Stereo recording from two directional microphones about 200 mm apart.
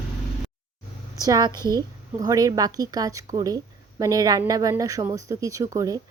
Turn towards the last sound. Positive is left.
turn(degrees=-15)  # may be behind; listen again after turning